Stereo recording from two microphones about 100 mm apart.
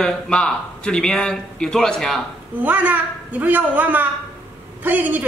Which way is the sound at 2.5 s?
20° right (ahead or behind).